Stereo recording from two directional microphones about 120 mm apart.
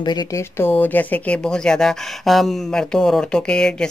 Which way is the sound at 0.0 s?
35° left (ahead or behind).